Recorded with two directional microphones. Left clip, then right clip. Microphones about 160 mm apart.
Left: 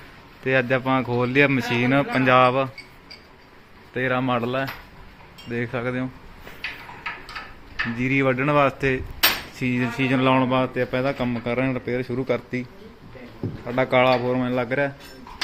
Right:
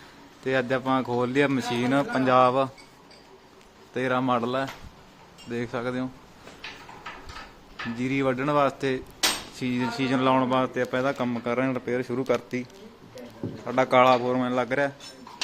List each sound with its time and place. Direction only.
0.4 s a man's voice: centre (ahead or behind)
3.9 s a man's voice: 10° right (ahead or behind)
7.9 s a man's voice: 10° left (ahead or behind)
13.7 s a man's voice: centre (ahead or behind)